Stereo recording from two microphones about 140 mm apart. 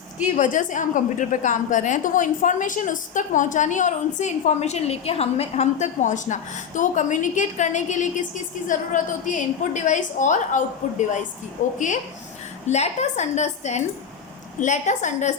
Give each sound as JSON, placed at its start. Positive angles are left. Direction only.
{"t": 0.3, "sound": "a woman's voice", "side_deg": 65}
{"t": 11.6, "sound": "a woman's voice", "side_deg": 70}
{"t": 12.6, "sound": "a woman's voice", "side_deg": 55}